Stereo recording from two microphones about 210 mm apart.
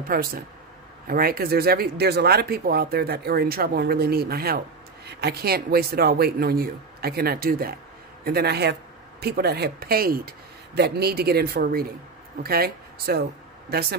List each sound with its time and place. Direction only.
0.1 s speech: 45° right (ahead or behind)